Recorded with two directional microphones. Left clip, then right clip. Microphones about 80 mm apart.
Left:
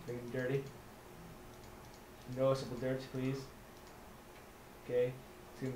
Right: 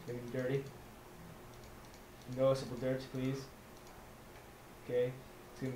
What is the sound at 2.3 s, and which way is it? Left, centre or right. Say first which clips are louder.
Speech: right 1 dB; centre.